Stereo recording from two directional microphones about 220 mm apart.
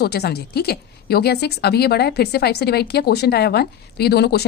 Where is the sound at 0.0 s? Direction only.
45° left (ahead or behind).